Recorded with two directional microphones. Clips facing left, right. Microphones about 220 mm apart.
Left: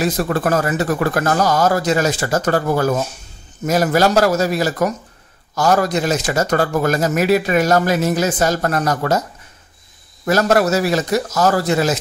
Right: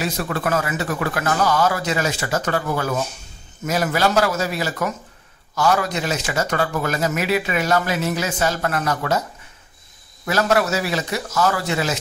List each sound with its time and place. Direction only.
0.0 s speech: 45° left (ahead or behind)
10.2 s speech: 40° left (ahead or behind)